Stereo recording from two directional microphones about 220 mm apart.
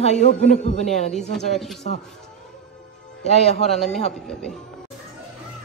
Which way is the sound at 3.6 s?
Centre (ahead or behind).